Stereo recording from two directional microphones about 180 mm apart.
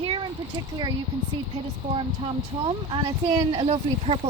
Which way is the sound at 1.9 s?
30° right (ahead or behind).